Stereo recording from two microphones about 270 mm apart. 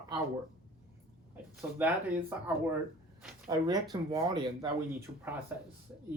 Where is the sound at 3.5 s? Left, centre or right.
Centre.